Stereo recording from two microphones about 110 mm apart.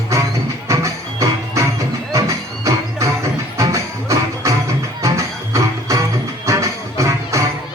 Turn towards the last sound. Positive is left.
turn(degrees=-30)  # may be behind; listen again after turning